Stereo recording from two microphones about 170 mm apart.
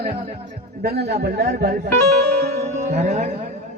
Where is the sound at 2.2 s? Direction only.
75° right (ahead or behind).